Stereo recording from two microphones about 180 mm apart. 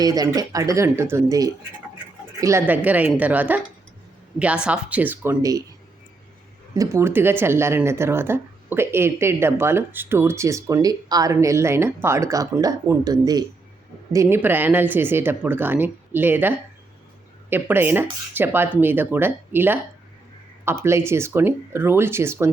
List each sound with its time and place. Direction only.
0.0 s speech: 20° right (ahead or behind)
6.7 s speech: 15° right (ahead or behind)